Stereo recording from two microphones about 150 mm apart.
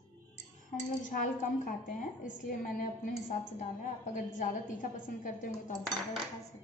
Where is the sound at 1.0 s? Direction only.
60° left (ahead or behind).